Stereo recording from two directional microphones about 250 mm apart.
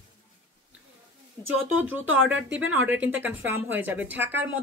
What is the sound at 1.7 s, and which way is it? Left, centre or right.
Speech, centre.